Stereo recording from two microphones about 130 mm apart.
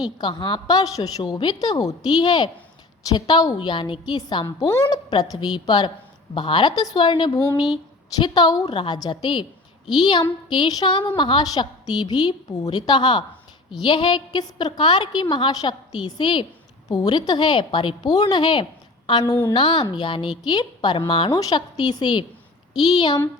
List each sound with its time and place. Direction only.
0.2 s a woman's voice: 35° left (ahead or behind)